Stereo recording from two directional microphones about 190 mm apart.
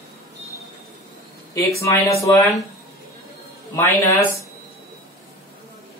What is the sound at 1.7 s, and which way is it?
Speech, 15° left (ahead or behind).